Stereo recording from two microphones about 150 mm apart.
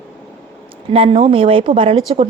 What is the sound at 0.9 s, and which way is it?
A woman's voice, 35° right (ahead or behind).